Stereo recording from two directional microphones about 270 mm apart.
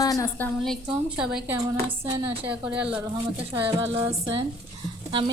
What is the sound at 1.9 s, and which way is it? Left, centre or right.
Speech, centre.